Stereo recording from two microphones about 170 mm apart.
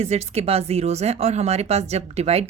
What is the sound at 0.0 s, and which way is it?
Speech, 40° right (ahead or behind).